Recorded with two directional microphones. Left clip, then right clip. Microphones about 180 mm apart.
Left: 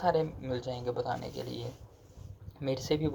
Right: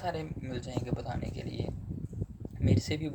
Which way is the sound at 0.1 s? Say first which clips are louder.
Left 8 dB; 10° right (ahead or behind).